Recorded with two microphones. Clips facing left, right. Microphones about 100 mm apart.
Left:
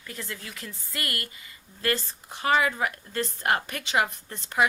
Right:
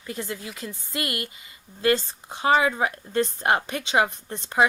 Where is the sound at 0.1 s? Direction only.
20° right (ahead or behind).